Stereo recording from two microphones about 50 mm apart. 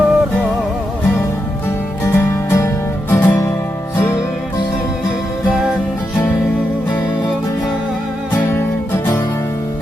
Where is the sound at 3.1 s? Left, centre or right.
Left.